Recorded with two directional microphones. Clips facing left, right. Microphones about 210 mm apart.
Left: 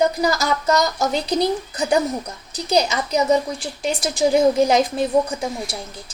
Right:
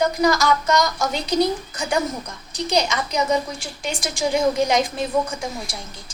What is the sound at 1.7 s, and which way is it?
A woman's voice, 40° left (ahead or behind).